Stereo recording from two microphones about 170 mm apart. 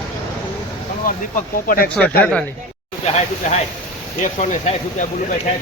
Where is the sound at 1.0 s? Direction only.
55° left (ahead or behind).